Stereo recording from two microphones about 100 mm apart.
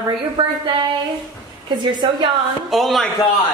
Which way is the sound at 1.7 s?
45° right (ahead or behind).